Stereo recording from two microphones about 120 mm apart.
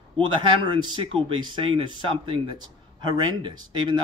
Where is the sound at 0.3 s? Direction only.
40° right (ahead or behind).